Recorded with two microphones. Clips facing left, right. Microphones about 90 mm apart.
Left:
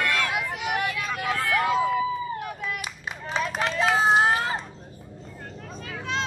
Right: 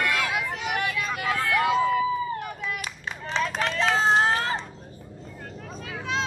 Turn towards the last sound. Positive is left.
turn(degrees=0)  # may be behind; listen again after turning